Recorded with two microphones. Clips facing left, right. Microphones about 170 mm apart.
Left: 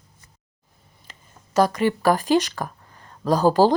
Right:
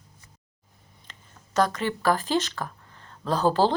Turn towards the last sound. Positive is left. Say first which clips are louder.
# left 5 dB
turn(degrees=10)  # may be behind; listen again after turning